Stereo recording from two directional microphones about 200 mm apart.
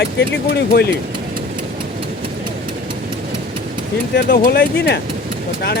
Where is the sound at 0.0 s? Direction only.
60° left (ahead or behind).